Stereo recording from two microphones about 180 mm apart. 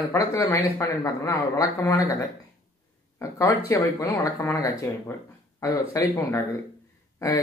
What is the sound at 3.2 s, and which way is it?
Speech, 20° left (ahead or behind).